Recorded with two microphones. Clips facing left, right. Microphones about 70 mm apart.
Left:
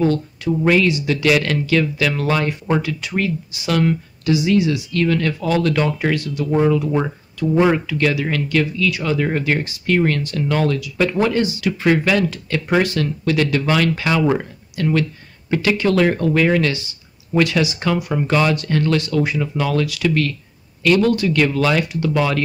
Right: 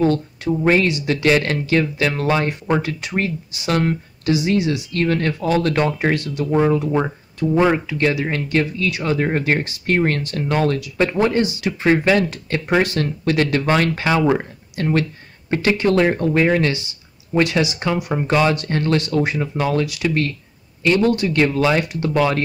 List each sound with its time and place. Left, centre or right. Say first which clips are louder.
0.0 s speech: even; right
2.8 s speech: left 1 dB; right
7.7 s speech: even; right